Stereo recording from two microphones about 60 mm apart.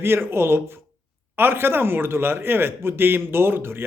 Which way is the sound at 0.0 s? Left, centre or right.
Right.